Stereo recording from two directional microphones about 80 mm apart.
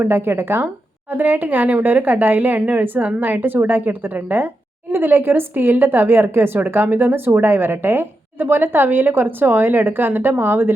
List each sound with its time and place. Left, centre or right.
0.0 s speech: right